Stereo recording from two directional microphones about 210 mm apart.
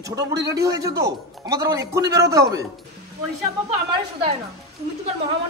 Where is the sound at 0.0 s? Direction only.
15° right (ahead or behind).